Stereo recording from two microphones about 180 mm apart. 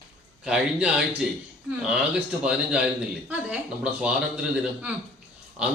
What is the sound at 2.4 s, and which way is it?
A man's voice, 5° right (ahead or behind).